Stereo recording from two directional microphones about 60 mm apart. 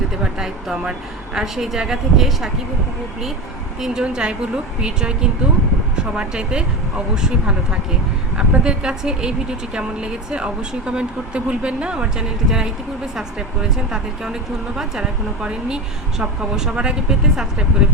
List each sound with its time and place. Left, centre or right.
0.2 s a woman's voice: centre
3.8 s a woman's voice: centre